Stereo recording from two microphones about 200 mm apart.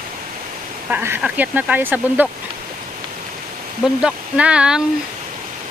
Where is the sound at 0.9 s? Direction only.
10° right (ahead or behind).